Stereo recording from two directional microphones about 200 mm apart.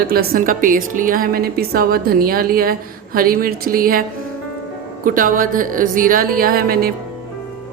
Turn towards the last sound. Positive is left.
turn(degrees=-50)  # may be behind; listen again after turning